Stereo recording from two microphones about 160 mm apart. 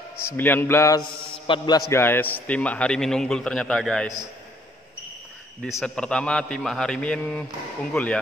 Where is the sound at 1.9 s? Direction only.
15° left (ahead or behind).